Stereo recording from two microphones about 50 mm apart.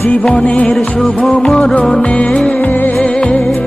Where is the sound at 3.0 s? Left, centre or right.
Left.